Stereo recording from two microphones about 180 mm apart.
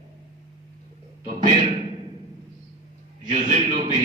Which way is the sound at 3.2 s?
45° right (ahead or behind).